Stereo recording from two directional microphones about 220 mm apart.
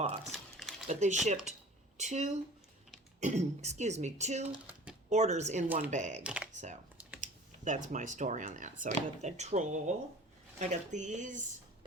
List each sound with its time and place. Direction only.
0.3 s a sound: centre (ahead or behind)
0.9 s speech: 30° right (ahead or behind)
6.2 s speech: 5° right (ahead or behind)
7.2 s speech: 35° right (ahead or behind)